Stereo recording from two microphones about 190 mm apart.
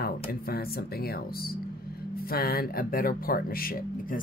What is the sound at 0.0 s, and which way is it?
Speech, 55° left (ahead or behind).